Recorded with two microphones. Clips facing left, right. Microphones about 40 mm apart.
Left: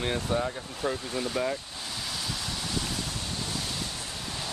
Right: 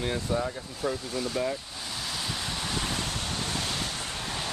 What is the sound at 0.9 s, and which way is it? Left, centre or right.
Speech, centre.